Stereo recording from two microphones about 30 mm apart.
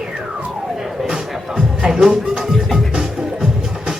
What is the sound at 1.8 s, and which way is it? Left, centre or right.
Speech, right.